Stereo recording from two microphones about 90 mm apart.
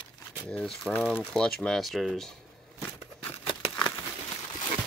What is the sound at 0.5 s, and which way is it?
Speech, 5° left (ahead or behind).